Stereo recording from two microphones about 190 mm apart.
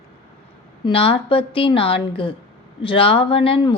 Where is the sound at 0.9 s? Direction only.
30° left (ahead or behind).